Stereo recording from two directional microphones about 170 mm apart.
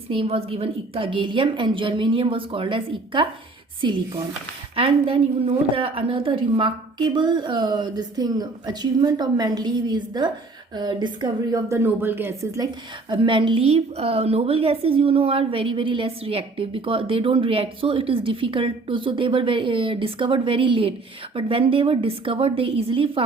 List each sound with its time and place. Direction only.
0.1 s a woman's voice: 35° right (ahead or behind); by 12.6 s 10° right (ahead or behind)
13.1 s a woman's voice: 30° right (ahead or behind)